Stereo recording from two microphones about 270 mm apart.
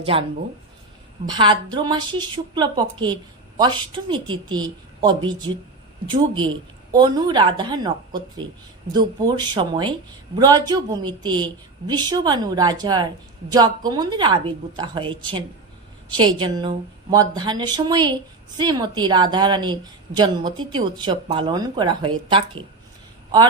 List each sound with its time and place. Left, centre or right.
0.0 s speech: right
1.3 s a woman's voice: centre